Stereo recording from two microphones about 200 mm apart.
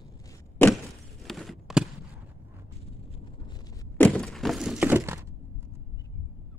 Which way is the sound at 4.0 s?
5° left (ahead or behind).